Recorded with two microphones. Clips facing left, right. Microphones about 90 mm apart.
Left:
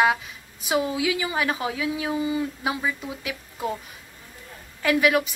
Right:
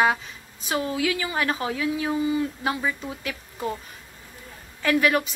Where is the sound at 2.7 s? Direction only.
5° left (ahead or behind).